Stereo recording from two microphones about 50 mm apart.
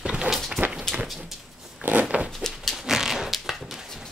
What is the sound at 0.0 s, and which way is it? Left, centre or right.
Walk, centre.